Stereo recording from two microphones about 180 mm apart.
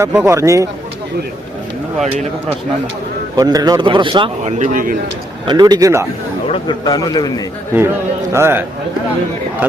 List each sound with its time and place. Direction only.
0.0 s a man's voice: 10° right (ahead or behind)
3.3 s a man's voice: 20° right (ahead or behind)
4.5 s a man's voice: 45° right (ahead or behind)
5.5 s a man's voice: 25° right (ahead or behind)
6.5 s a man's voice: 25° left (ahead or behind)
7.7 s a man's voice: 15° right (ahead or behind)